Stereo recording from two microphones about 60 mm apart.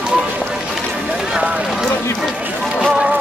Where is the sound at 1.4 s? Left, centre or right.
Right.